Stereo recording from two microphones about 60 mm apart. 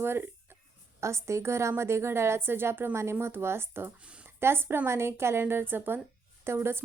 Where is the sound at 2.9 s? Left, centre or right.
Right.